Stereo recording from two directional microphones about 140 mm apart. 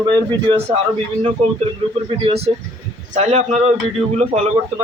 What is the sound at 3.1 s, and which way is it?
Speech, 55° right (ahead or behind).